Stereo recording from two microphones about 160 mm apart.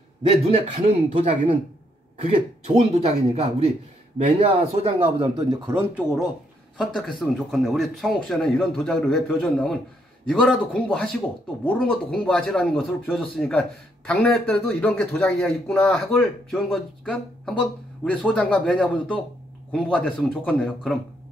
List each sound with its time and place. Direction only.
0.2 s a man's voice: 40° right (ahead or behind)
3.0 s speech: 40° right (ahead or behind)
5.5 s speech: 15° right (ahead or behind); by 21.0 s 5° left (ahead or behind)